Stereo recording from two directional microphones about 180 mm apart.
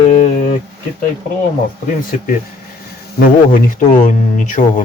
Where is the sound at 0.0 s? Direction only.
40° left (ahead or behind).